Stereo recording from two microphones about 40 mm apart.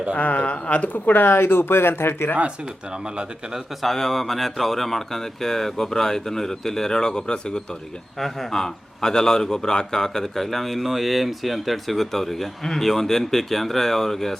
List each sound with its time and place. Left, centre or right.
0.2 s speech: left
1.3 s speech: left
2.9 s speech: right
3.8 s a man's voice: centre